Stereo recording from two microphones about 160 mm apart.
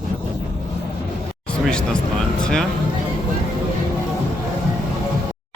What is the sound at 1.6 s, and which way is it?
Speech, 5° left (ahead or behind).